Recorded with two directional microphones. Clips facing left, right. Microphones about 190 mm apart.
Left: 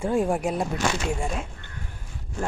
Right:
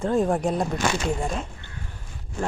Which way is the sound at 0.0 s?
10° left (ahead or behind).